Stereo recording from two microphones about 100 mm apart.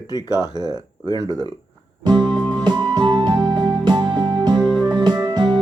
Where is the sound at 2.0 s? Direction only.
45° right (ahead or behind).